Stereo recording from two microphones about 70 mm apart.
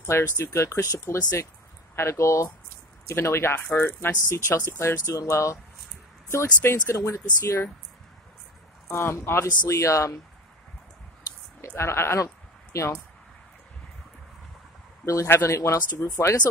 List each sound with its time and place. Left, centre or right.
0.0 s speech: left
2.0 s speech: left
4.3 s speech: left
8.9 s speech: left
11.6 s speech: left
15.2 s speech: left